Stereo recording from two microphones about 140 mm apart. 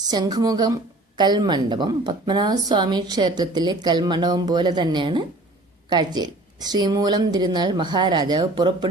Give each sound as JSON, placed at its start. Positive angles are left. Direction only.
{"t": 0.1, "sound": "a woman's voice", "side_deg": -30}